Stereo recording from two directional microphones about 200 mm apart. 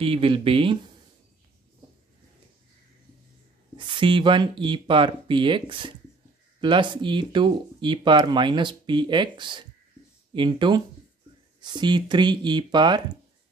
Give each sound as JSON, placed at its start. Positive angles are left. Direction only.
{"t": 0.0, "sound": "speech", "side_deg": -25}
{"t": 3.7, "sound": "speech", "side_deg": -25}